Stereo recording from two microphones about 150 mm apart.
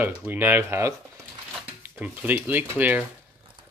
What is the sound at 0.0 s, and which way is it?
Speech, 10° right (ahead or behind).